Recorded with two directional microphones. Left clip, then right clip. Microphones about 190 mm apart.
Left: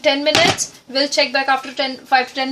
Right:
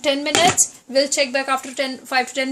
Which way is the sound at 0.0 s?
40° right (ahead or behind).